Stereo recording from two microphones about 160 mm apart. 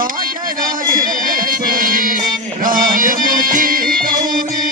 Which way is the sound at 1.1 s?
60° right (ahead or behind).